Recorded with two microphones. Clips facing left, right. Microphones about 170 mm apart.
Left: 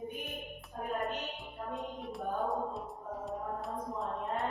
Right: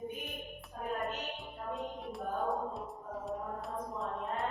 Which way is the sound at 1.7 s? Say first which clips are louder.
Right 1 dB; centre (ahead or behind).